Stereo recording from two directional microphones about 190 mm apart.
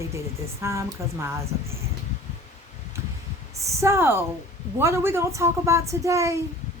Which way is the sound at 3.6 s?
15° right (ahead or behind).